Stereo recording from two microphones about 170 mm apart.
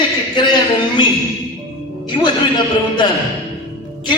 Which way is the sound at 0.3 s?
25° left (ahead or behind).